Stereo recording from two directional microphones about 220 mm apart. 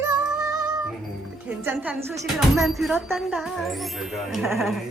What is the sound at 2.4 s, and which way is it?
Speech, centre (ahead or behind).